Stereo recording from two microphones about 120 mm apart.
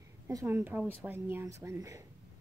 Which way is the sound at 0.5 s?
15° right (ahead or behind).